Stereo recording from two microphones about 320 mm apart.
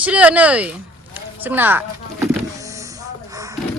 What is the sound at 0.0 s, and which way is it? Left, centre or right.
Speech, centre.